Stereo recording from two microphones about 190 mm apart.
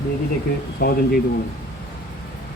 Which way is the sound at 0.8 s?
50° left (ahead or behind).